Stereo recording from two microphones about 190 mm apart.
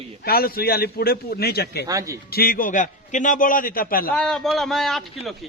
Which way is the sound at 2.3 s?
55° left (ahead or behind).